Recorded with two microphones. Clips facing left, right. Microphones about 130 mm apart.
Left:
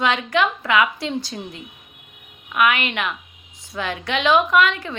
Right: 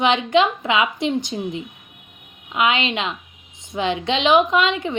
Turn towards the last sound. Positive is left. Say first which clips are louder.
# left 1 dB
turn(degrees=-20)  # may be behind; listen again after turning